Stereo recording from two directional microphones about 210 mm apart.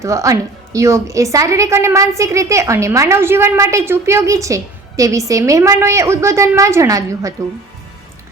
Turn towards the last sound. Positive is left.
turn(degrees=-15)  # may be behind; listen again after turning